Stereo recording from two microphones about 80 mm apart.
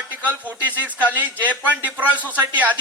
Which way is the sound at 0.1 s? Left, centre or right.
Right.